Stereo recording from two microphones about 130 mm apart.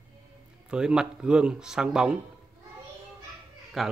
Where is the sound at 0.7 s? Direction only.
5° right (ahead or behind).